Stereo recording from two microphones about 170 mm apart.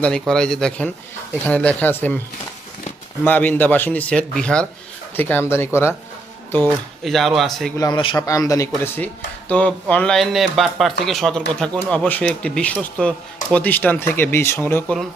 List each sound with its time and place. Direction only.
0.0 s speech: 5° left (ahead or behind)
3.2 s speech: 10° left (ahead or behind)
7.0 s speech: centre (ahead or behind)
7.8 s speech: 25° left (ahead or behind)